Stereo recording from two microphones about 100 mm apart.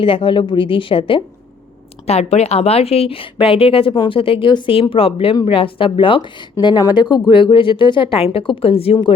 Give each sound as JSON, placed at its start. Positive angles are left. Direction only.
{"t": 0.0, "sound": "a woman's voice", "side_deg": 60}
{"t": 2.0, "sound": "a woman's voice", "side_deg": 90}